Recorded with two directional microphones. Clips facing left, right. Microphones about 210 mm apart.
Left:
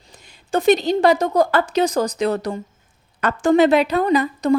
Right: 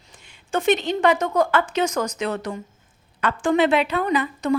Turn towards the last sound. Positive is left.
turn(degrees=40)  # may be behind; listen again after turning